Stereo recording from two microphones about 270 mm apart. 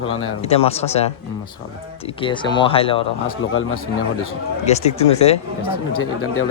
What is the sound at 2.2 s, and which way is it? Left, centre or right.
Speech, centre.